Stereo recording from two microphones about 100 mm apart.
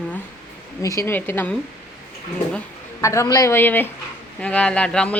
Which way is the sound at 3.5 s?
20° left (ahead or behind).